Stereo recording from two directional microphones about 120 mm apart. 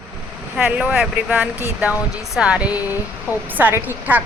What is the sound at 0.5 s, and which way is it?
Speech, 5° right (ahead or behind).